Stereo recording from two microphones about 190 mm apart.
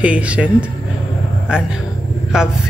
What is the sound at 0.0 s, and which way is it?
Speech, 5° right (ahead or behind).